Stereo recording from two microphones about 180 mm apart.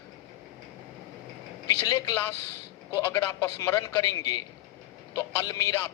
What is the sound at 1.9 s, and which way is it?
Speech, 20° left (ahead or behind).